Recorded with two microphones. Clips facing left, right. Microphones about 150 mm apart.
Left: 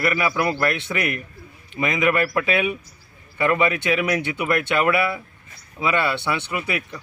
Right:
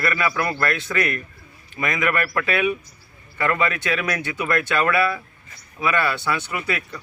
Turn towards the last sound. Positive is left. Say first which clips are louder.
# left 1 dB
turn(degrees=20)  # may be behind; listen again after turning